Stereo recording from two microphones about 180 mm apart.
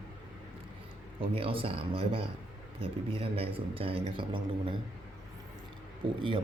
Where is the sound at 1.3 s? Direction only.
30° right (ahead or behind).